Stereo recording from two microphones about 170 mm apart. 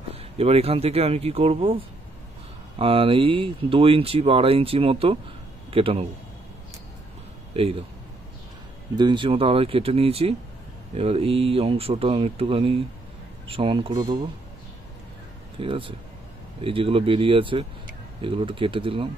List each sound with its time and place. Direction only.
0.1 s speech: 35° right (ahead or behind)
2.8 s speech: 30° right (ahead or behind)
7.5 s speech: 35° right (ahead or behind)
8.9 s speech: 25° right (ahead or behind)
15.6 s speech: 30° right (ahead or behind)